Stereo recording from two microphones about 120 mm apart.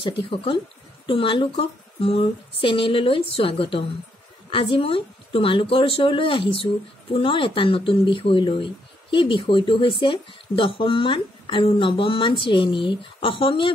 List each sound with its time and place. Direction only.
0.0 s a woman's voice: 45° left (ahead or behind)